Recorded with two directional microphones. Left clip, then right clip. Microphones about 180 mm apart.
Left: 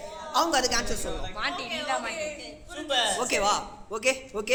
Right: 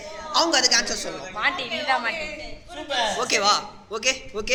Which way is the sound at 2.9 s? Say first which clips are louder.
Right 3 dB; 20° left (ahead or behind).